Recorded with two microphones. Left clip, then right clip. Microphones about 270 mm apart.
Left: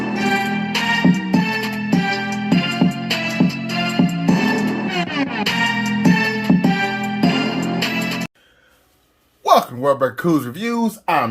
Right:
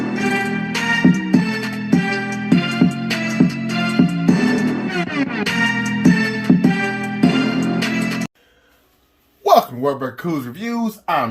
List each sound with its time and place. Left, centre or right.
0.0 s music: right
9.4 s hiccup: centre
10.2 s speech: left